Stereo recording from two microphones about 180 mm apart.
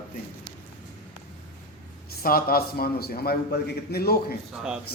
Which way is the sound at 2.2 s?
55° left (ahead or behind).